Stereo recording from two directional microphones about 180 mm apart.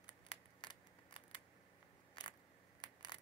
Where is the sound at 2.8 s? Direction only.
25° left (ahead or behind).